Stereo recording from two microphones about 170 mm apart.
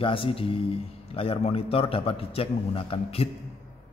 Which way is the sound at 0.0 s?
30° left (ahead or behind).